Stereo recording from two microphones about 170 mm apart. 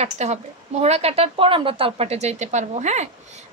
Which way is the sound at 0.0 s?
40° right (ahead or behind).